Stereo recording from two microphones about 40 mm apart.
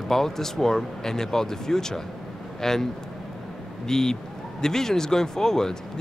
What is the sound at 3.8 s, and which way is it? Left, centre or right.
Speech, centre.